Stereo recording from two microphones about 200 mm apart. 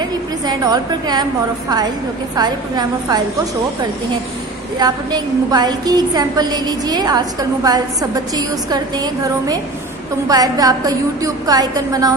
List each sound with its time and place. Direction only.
0.0 s a woman's voice: 20° right (ahead or behind)
2.3 s a woman's voice: 20° right (ahead or behind)
4.7 s a woman's voice: 20° right (ahead or behind)